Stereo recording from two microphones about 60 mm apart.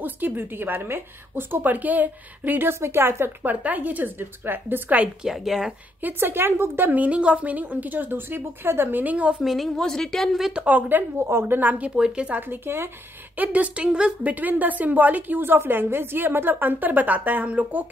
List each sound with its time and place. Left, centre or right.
0.0 s a woman's voice: right
2.7 s a woman's voice: right
3.4 s a woman's voice: right
5.2 s a woman's voice: centre
6.0 s a woman's voice: right
6.9 s a woman's voice: right
9.4 s a woman's voice: centre
9.8 s a woman's voice: centre
10.5 s a woman's voice: right
12.0 s a woman's voice: centre
12.4 s a woman's voice: right
13.4 s a woman's voice: right
14.3 s a woman's voice: right